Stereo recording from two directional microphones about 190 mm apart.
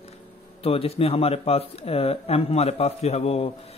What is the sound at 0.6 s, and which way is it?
Speech, 30° left (ahead or behind).